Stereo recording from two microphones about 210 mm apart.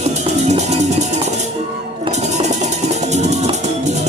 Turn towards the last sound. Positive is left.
turn(degrees=-35)  # may be behind; listen again after turning